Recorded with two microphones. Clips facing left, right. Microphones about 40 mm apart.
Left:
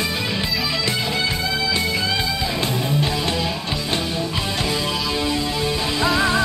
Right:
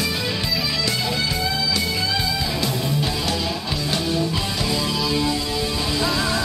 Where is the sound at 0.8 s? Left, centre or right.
Left.